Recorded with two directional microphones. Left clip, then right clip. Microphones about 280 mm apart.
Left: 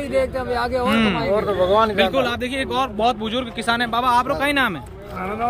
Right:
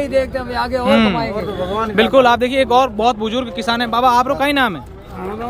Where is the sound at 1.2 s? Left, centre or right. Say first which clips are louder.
Left 3 dB; left.